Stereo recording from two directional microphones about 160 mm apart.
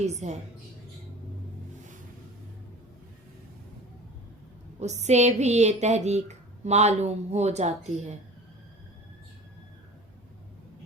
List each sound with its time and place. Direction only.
0.0 s speech: 45° right (ahead or behind)
4.8 s speech: 45° right (ahead or behind)